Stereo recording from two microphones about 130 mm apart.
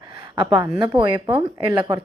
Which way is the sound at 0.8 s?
40° right (ahead or behind).